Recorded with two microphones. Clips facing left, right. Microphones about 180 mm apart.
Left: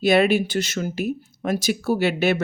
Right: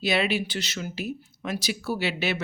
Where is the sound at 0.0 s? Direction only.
50° left (ahead or behind).